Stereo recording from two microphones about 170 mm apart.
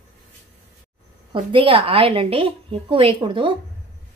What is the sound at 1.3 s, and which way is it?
A woman's voice, 30° right (ahead or behind).